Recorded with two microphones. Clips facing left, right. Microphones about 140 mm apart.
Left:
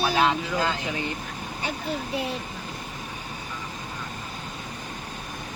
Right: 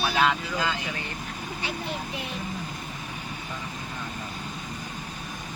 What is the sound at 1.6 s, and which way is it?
Speech, 35° left (ahead or behind).